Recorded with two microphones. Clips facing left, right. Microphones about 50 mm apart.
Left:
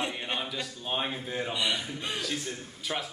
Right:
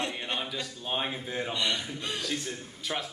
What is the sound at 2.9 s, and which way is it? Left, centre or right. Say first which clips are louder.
Speech: even; centre.